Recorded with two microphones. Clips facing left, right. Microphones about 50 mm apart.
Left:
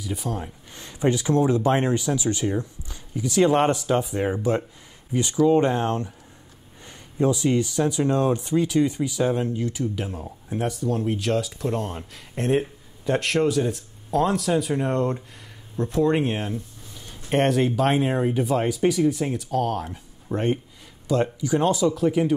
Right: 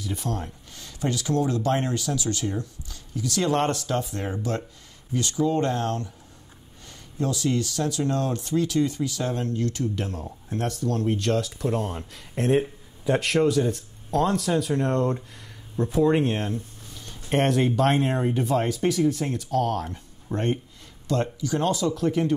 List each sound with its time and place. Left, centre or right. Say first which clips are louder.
0.0 s speech: left 1 dB; centre
0.7 s speech: left 6 dB; left; by 22.3 s centre